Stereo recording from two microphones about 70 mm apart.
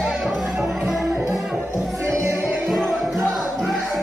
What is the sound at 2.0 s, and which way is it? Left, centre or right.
Music, right.